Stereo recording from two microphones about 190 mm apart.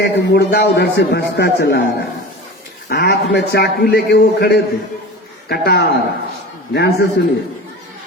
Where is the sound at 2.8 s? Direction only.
55° left (ahead or behind).